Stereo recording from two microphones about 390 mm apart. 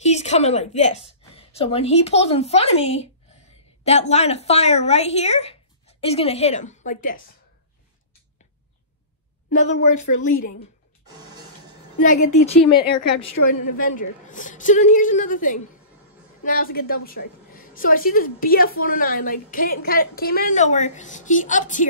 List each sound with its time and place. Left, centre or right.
0.0 s a woman's voice: centre
4.1 s speech: centre
9.5 s a woman's voice: centre
12.2 s speech: left
13.7 s a woman's voice: centre